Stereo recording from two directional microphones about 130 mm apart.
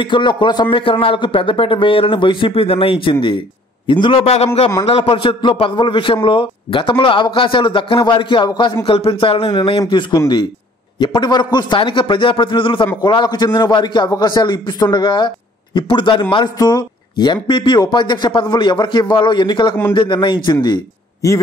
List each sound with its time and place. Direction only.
0.0 s a man's voice: 35° left (ahead or behind)